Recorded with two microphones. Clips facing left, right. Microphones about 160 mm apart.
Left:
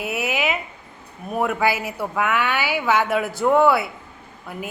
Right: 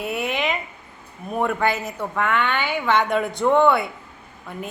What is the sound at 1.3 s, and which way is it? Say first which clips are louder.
A woman's voice: left 1 dB; 5° left (ahead or behind).